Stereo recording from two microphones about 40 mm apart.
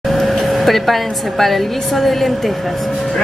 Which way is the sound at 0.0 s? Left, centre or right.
Centre.